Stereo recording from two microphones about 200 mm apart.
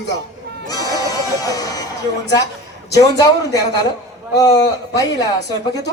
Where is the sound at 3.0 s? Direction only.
20° left (ahead or behind).